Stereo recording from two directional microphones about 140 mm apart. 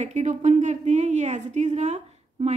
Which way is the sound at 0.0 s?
55° right (ahead or behind).